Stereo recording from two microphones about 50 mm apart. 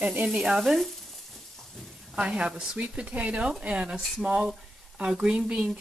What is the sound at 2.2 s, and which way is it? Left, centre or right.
Speech, right.